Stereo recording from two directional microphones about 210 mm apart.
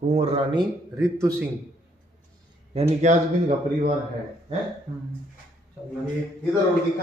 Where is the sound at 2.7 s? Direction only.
30° right (ahead or behind).